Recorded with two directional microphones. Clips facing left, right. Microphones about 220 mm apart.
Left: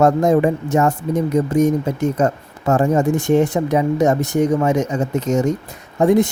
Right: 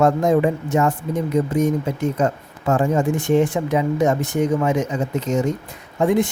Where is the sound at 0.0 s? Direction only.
40° left (ahead or behind).